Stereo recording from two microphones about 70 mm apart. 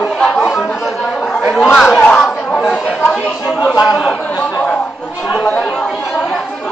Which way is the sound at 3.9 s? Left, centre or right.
Centre.